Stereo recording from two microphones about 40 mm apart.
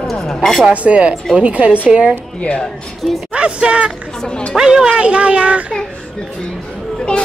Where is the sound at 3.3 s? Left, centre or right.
Right.